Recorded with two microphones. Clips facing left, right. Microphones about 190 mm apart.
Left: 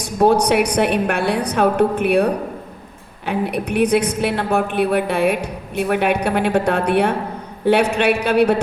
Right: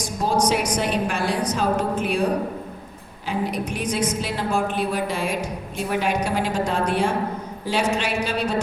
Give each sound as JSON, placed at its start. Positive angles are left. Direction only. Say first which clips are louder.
{"t": 0.0, "sound": "a woman's voice", "louder": "left 7 dB", "side_deg": 60}